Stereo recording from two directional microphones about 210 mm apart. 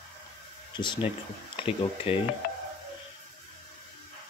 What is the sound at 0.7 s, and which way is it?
Speech, 20° left (ahead or behind).